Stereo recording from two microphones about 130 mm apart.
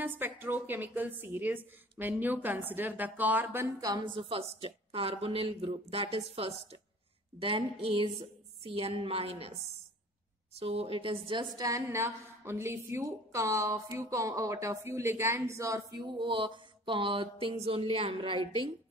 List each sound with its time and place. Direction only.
0.0 s a woman's voice: 15° right (ahead or behind)
3.8 s a woman's voice: 35° right (ahead or behind)
10.5 s a woman's voice: 50° right (ahead or behind)
11.5 s a woman's voice: 25° right (ahead or behind)
16.1 s a sound: 40° right (ahead or behind)